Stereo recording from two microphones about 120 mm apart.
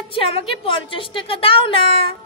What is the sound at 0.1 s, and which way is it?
A woman's voice, 50° left (ahead or behind).